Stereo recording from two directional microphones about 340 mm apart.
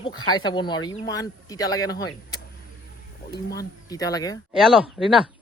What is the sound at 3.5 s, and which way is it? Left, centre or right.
Speech, centre.